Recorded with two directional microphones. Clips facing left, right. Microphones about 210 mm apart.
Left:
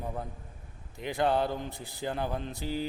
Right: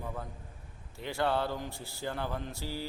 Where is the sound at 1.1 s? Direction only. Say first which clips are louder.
Left 3 dB; 15° left (ahead or behind).